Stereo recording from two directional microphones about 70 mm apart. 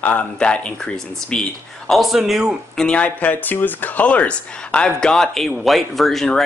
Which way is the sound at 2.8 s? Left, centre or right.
Centre.